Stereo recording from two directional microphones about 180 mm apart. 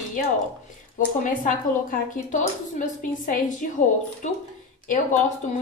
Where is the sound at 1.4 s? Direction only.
45° left (ahead or behind).